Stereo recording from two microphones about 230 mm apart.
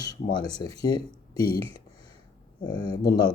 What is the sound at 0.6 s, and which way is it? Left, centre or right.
Speech, centre.